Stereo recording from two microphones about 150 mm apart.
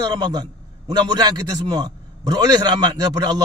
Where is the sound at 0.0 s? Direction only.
30° right (ahead or behind).